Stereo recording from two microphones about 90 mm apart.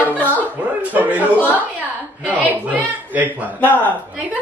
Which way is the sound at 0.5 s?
15° right (ahead or behind).